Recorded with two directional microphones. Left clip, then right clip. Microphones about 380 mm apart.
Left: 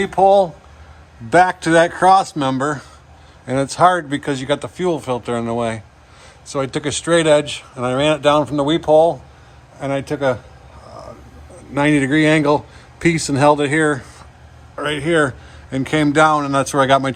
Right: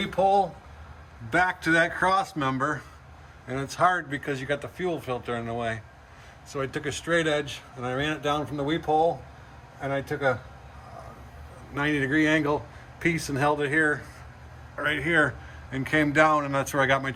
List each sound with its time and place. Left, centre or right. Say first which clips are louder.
1.3 s speech: left 10 dB; centre
11.9 s speech: left 8 dB; centre
14.8 s speech: left 6 dB; centre